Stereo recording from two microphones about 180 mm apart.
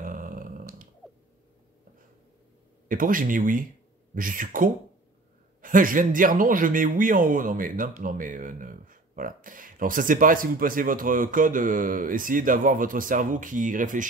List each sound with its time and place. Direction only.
0.0 s dog: 50° right (ahead or behind)
2.9 s a man's voice: 50° right (ahead or behind)